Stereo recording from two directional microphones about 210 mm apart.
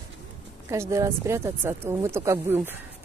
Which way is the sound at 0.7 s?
15° right (ahead or behind).